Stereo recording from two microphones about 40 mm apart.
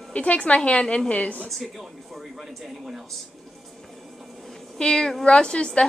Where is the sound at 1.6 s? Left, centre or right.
Centre.